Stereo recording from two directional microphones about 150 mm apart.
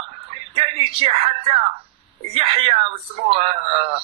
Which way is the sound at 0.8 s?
40° right (ahead or behind).